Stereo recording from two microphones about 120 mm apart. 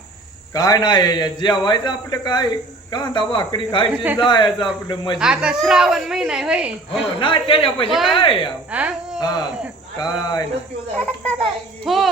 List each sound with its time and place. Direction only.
0.5 s a man's voice: 30° left (ahead or behind)
3.9 s a man's voice: 15° right (ahead or behind)
4.2 s a man's voice: 40° left (ahead or behind)
5.2 s a woman's voice: 5° right (ahead or behind)
7.2 s speech: 45° left (ahead or behind)
7.9 s a woman's voice: centre (ahead or behind)
8.1 s speech: 45° left (ahead or behind)
8.7 s speech: 10° right (ahead or behind)
9.2 s a man's voice: 35° left (ahead or behind)
10.9 s a child's voice: 10° left (ahead or behind)
11.9 s a woman's voice: centre (ahead or behind)